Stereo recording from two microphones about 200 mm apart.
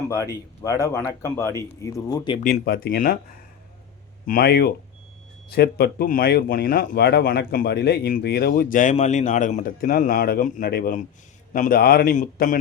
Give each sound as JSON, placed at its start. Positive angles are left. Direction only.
{"t": 0.1, "sound": "speech", "side_deg": 15}
{"t": 2.4, "sound": "speech", "side_deg": 45}
{"t": 4.3, "sound": "speech", "side_deg": 50}